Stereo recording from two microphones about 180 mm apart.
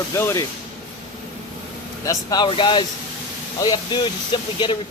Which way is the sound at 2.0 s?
20° left (ahead or behind).